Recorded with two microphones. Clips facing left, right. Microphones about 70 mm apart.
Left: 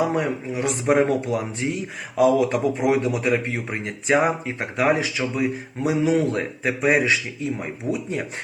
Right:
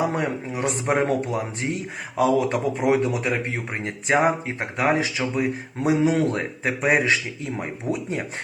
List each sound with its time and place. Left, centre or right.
0.1 s speech: right